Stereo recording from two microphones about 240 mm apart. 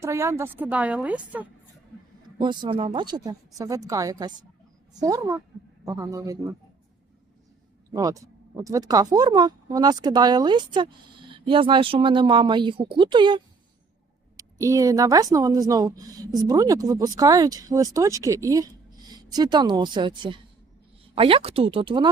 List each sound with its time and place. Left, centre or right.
0.0 s a woman's voice: centre
2.4 s a woman's voice: centre
7.9 s a woman's voice: centre